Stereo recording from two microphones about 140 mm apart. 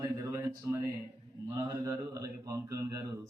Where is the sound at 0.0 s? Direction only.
20° right (ahead or behind).